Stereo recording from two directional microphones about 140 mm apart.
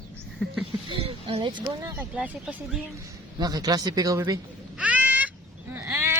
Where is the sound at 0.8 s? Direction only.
45° right (ahead or behind).